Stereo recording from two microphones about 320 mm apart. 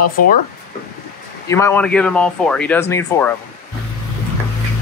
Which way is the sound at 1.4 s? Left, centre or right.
Centre.